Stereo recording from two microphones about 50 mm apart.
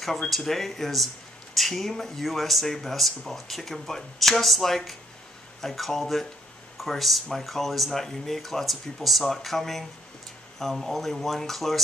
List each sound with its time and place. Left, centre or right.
0.0 s speech: centre